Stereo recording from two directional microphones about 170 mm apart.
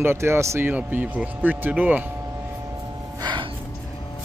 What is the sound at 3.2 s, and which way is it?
Music, 25° right (ahead or behind).